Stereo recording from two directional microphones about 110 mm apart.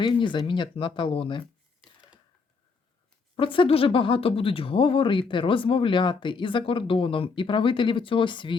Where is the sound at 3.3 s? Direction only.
50° left (ahead or behind).